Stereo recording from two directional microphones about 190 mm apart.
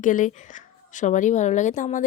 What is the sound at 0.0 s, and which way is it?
A woman's voice, 45° left (ahead or behind).